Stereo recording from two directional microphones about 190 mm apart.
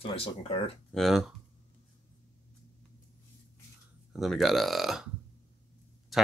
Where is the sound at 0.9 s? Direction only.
Centre (ahead or behind).